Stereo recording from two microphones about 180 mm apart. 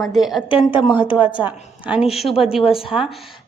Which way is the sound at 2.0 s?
35° left (ahead or behind).